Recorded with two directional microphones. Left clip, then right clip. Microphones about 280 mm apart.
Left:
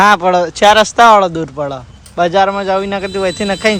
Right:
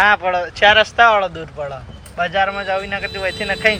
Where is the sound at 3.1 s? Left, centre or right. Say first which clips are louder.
Left 6 dB; left.